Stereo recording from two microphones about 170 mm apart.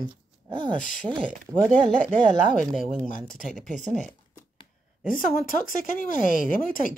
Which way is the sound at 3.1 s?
50° left (ahead or behind).